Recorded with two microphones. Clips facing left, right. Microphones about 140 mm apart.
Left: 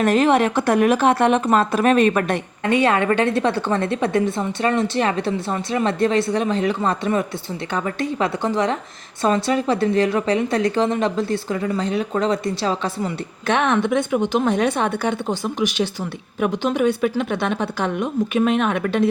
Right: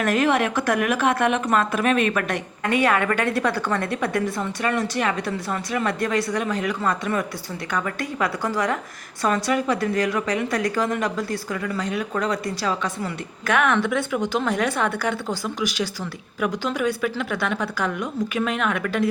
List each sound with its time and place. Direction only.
0.0 s a woman's voice: 25° left (ahead or behind)